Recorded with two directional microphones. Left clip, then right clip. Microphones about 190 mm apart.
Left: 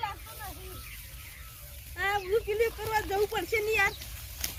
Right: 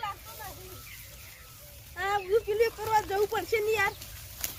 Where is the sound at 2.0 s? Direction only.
10° right (ahead or behind).